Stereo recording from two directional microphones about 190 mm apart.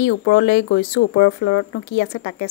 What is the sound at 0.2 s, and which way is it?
Speech, 80° left.